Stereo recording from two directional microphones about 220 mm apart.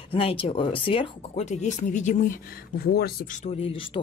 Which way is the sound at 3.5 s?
25° left (ahead or behind).